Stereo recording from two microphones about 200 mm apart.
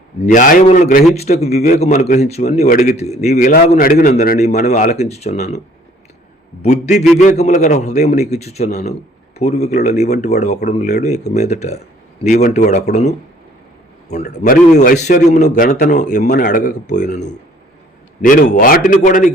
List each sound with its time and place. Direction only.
0.3 s a man's voice: 40° left (ahead or behind)
3.7 s a man's voice: 45° left (ahead or behind)
6.6 s a man's voice: 35° left (ahead or behind)
14.3 s a man's voice: 40° left (ahead or behind)